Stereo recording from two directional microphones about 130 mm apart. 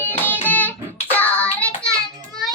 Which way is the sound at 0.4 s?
15° left (ahead or behind).